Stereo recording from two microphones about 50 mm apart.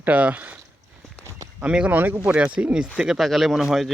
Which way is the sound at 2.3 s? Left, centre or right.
Right.